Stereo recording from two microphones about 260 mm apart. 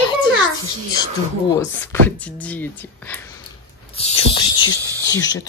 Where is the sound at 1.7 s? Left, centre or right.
Centre.